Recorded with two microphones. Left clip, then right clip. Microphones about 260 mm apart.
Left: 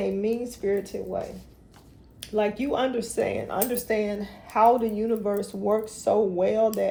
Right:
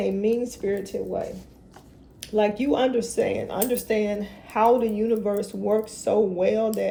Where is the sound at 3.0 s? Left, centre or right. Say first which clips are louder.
Right 3 dB; left.